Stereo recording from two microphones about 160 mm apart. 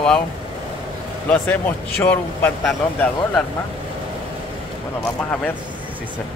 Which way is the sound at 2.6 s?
5° left (ahead or behind).